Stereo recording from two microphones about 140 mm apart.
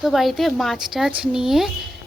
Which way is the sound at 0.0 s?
Centre (ahead or behind).